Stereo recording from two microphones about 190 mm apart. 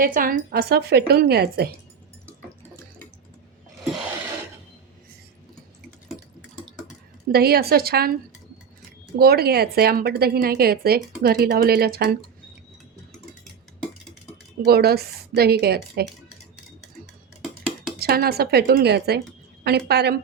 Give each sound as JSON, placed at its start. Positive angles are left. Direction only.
{"t": 0.0, "sound": "a woman's voice", "side_deg": -50}
{"t": 7.3, "sound": "a woman's voice", "side_deg": -55}
{"t": 9.1, "sound": "a woman's voice", "side_deg": -55}
{"t": 14.6, "sound": "a woman's voice", "side_deg": -55}
{"t": 18.0, "sound": "a woman's voice", "side_deg": -55}